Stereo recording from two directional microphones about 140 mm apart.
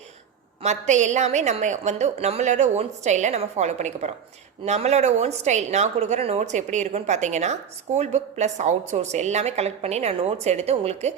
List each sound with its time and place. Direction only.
0.6 s a woman's voice: 55° right (ahead or behind)